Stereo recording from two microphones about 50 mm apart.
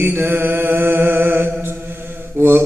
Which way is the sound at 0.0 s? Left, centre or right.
Right.